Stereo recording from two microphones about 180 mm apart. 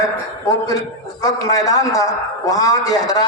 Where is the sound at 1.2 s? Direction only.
20° left (ahead or behind).